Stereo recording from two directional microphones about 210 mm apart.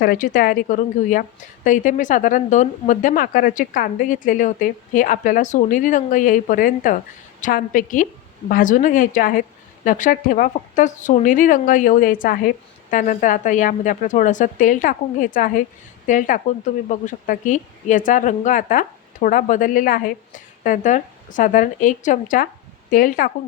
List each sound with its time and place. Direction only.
0.0 s a woman's voice: 45° left (ahead or behind)